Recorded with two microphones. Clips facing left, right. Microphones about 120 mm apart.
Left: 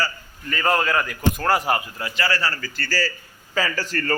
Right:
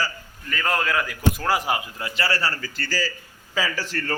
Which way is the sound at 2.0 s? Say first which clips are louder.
Left 1 dB; 30° right (ahead or behind).